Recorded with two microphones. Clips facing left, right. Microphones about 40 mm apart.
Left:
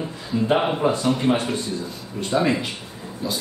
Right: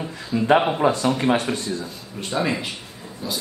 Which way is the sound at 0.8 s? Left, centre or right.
Right.